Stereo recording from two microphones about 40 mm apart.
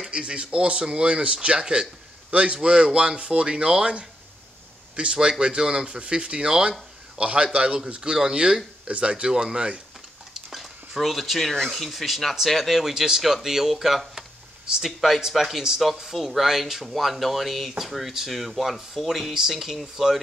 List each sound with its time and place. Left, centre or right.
0.1 s speech: right
10.3 s a sound: centre
11.7 s speech: centre
12.9 s speech: centre